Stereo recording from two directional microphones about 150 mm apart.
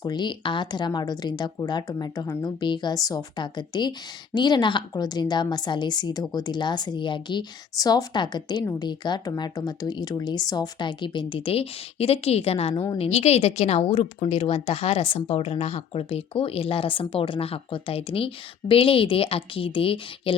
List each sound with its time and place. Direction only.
0.0 s a woman's voice: 30° left (ahead or behind)